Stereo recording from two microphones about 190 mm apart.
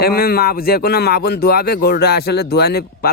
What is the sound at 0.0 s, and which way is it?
Speech, 55° left (ahead or behind).